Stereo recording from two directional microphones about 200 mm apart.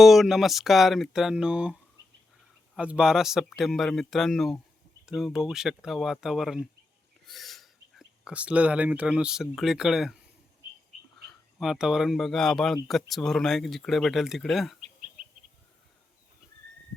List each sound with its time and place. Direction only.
0.0 s speech: centre (ahead or behind)
2.7 s speech: 5° right (ahead or behind)
11.6 s speech: centre (ahead or behind)